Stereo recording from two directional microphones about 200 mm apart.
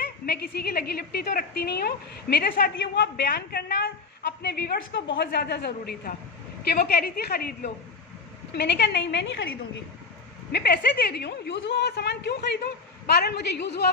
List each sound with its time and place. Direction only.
0.3 s a woman's voice: 50° left (ahead or behind)
10.5 s a woman's voice: 50° left (ahead or behind)